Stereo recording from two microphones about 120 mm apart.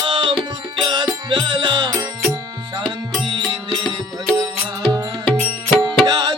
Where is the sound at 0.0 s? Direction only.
45° right (ahead or behind).